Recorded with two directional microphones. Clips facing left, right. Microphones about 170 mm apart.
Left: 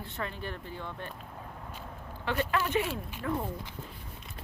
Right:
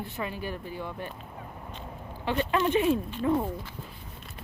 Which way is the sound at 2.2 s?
15° right (ahead or behind).